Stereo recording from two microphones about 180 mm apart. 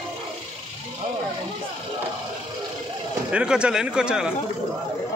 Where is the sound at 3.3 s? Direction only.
5° right (ahead or behind).